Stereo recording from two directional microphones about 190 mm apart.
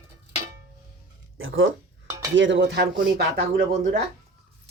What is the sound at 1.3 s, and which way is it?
Speech, 90° right.